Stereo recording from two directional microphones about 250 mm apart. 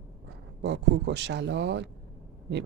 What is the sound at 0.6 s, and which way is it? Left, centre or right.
Speech, right.